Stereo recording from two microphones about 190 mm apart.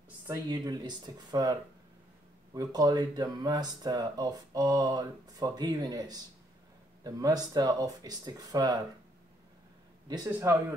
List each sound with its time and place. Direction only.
0.3 s speech: 20° right (ahead or behind)
10.0 s a man's voice: 20° right (ahead or behind)